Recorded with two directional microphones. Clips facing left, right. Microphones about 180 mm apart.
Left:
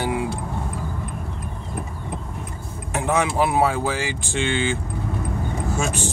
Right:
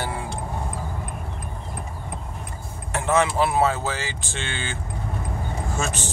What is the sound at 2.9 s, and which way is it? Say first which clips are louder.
Speech: even; 15° left (ahead or behind).